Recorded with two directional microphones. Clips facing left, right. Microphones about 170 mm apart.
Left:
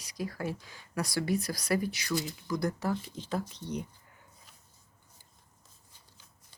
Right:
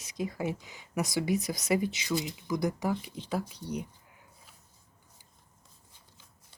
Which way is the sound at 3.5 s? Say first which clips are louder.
Right 1 dB; 10° right (ahead or behind).